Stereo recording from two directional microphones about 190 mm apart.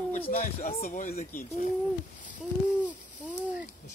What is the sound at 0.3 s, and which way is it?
Speech, 40° left (ahead or behind).